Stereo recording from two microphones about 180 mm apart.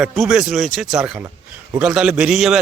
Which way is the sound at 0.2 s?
5° right (ahead or behind).